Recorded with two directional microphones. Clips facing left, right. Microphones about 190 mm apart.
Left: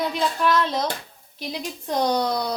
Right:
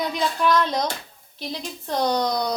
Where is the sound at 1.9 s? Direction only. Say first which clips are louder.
Even; 10° left (ahead or behind).